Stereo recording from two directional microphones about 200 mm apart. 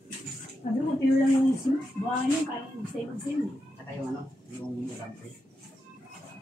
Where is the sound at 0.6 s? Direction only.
35° left (ahead or behind).